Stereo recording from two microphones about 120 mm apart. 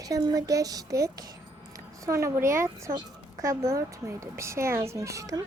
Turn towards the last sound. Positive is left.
turn(degrees=-30)  # may be behind; listen again after turning